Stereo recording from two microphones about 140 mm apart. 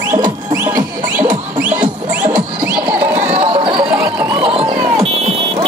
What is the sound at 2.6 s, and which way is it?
Music, 10° right (ahead or behind).